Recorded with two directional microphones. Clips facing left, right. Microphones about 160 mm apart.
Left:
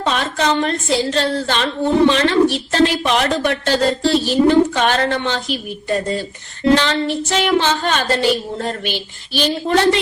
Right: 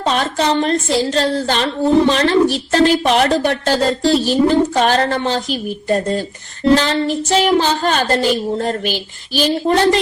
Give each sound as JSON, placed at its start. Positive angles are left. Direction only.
{"t": 0.0, "sound": "a woman's voice", "side_deg": -35}